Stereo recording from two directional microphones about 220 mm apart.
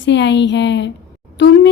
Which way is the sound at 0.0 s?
55° left (ahead or behind).